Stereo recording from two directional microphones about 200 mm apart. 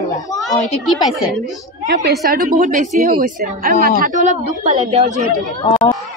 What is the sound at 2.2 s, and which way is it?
A woman's voice, 45° right (ahead or behind).